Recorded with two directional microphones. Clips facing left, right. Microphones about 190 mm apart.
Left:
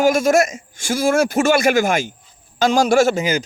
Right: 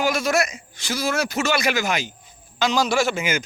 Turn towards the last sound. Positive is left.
turn(degrees=35)  # may be behind; listen again after turning